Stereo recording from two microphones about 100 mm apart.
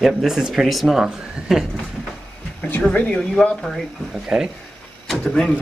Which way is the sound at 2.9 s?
10° left (ahead or behind).